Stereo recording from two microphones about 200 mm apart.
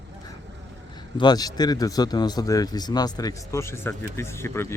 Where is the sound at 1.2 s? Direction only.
20° left (ahead or behind).